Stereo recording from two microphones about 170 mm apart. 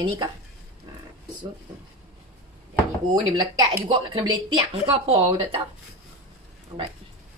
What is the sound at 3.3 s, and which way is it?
A woman's voice, 25° right (ahead or behind).